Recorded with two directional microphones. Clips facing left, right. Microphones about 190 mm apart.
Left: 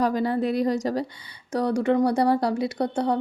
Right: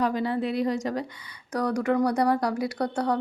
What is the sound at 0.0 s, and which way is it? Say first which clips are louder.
Speech: left 3 dB; 40° left (ahead or behind).